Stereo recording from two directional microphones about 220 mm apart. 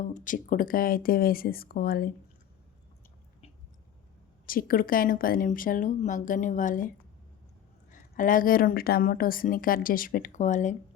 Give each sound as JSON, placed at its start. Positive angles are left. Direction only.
{"t": 0.1, "sound": "speech", "side_deg": 35}
{"t": 4.4, "sound": "speech", "side_deg": 40}